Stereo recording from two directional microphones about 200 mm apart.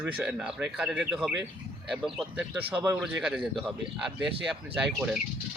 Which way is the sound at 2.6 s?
15° right (ahead or behind).